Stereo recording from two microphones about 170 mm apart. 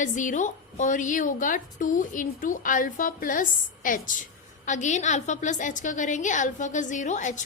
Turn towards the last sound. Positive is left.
turn(degrees=45)  # may be behind; listen again after turning